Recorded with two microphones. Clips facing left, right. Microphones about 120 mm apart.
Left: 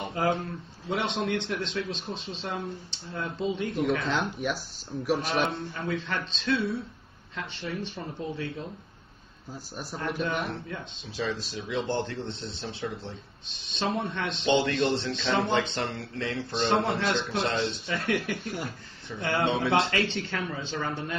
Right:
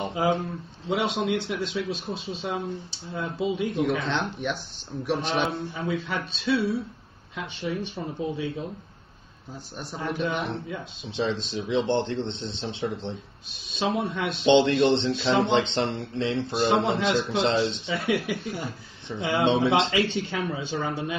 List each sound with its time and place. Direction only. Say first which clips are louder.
0.1 s speech: right 1 dB; 5° right (ahead or behind)
9.8 s speech: right 2 dB; centre (ahead or behind)
11.1 s speech: right 4 dB; 25° right (ahead or behind)
13.7 s speech: right 3 dB; 5° right (ahead or behind)
14.4 s speech: right 6 dB; 25° right (ahead or behind)
16.5 s speech: right 2 dB; 5° right (ahead or behind)
19.4 s speech: right 6 dB; 25° right (ahead or behind)
19.8 s speech: right 3 dB; 15° right (ahead or behind)